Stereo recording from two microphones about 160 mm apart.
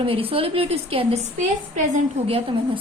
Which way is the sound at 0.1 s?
35° right (ahead or behind).